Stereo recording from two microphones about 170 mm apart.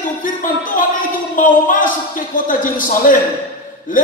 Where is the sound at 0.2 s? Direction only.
50° left (ahead or behind).